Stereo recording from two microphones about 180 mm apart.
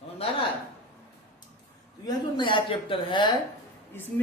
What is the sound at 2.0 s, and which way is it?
A woman's voice, 25° left (ahead or behind).